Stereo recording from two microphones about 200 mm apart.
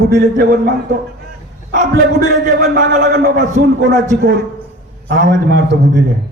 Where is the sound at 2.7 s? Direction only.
60° right (ahead or behind).